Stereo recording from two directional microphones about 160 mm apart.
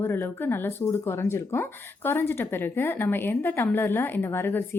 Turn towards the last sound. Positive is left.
turn(degrees=15)  # may be behind; listen again after turning